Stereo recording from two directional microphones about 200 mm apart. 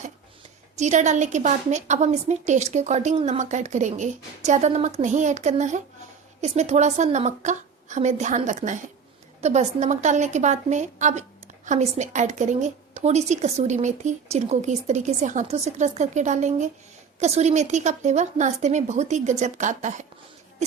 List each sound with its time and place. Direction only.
0.8 s a woman's voice: 35° right (ahead or behind)